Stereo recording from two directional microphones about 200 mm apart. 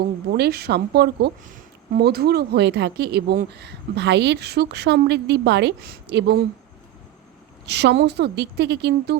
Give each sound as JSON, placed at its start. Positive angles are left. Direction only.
{"t": 0.0, "sound": "a woman's voice", "side_deg": -50}
{"t": 7.7, "sound": "speech", "side_deg": -60}